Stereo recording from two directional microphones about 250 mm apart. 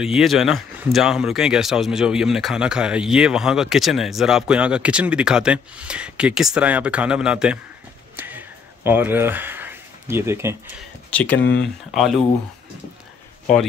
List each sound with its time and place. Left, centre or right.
0.0 s speech: centre
8.2 s a sound: centre
11.1 s speech: centre